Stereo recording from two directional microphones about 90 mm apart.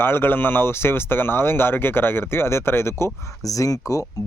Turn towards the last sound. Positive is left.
turn(degrees=40)  # may be behind; listen again after turning